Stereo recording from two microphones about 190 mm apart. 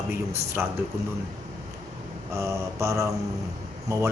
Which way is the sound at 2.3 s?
15° right (ahead or behind).